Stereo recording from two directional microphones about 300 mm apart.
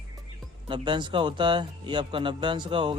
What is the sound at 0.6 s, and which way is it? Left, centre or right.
Speech, centre.